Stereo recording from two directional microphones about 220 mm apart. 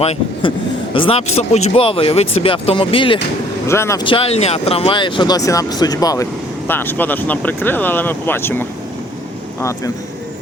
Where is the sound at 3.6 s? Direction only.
10° left (ahead or behind).